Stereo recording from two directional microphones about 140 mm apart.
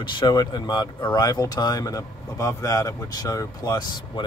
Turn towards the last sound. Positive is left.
turn(degrees=25)  # may be behind; listen again after turning